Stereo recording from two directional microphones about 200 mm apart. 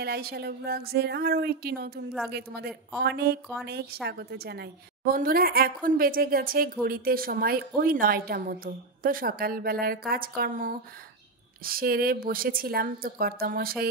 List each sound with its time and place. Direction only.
0.0 s a woman's voice: 50° right (ahead or behind)